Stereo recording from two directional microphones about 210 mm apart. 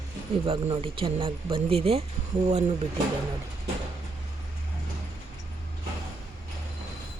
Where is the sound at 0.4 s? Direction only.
25° right (ahead or behind).